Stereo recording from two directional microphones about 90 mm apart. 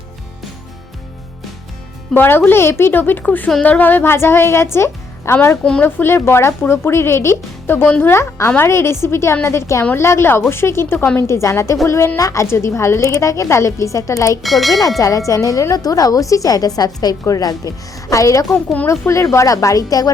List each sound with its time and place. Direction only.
2.1 s speech: 20° left (ahead or behind)
7.9 s speech: 15° left (ahead or behind)
8.1 s speech: 30° left (ahead or behind)
11.3 s a woman's voice: 30° left (ahead or behind)
14.4 s speech: centre (ahead or behind)
14.8 s a woman's voice: 40° left (ahead or behind)
18.5 s speech: 15° left (ahead or behind)
18.9 s a woman's voice: 35° left (ahead or behind)